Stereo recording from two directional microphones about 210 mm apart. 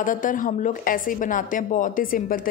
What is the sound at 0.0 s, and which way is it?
A woman's voice, 40° left (ahead or behind).